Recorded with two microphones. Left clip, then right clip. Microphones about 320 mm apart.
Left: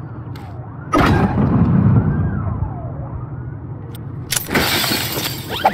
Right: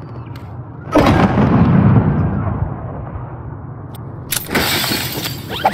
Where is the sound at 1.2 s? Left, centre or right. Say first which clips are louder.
Right 4 dB; right.